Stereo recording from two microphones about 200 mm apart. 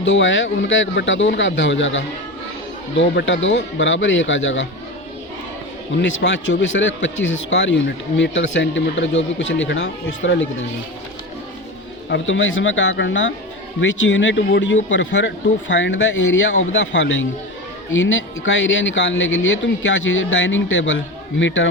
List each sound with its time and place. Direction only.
0.0 s speech: 70° left (ahead or behind)
6.0 s speech: 60° left (ahead or behind)
12.0 s speech: 70° left (ahead or behind)